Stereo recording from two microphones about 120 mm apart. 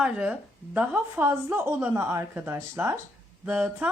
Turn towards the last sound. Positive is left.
turn(degrees=-10)  # may be behind; listen again after turning